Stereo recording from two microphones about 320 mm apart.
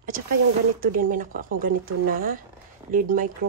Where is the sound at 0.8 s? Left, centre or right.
Right.